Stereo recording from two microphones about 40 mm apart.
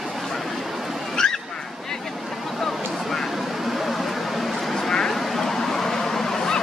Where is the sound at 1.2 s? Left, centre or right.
Centre.